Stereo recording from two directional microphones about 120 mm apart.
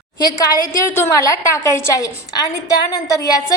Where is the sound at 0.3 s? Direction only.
30° left (ahead or behind).